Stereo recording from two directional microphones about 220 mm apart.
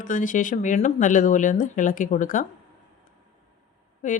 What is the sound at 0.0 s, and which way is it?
Speech, 35° left (ahead or behind).